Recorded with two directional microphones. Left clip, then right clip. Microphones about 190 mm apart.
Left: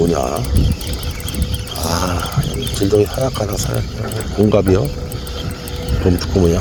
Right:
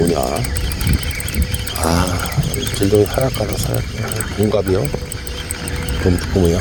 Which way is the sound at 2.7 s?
5° left (ahead or behind).